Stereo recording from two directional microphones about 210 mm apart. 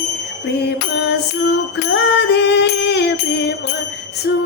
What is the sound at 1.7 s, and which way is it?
Music, 55° left (ahead or behind).